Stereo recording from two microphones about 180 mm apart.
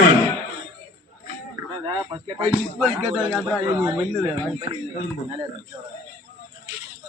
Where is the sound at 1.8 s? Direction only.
25° right (ahead or behind).